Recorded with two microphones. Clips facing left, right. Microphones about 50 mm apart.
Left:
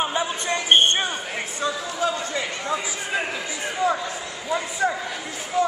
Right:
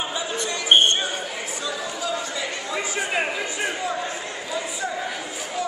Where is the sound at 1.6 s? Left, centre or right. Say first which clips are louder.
Left 6 dB; left.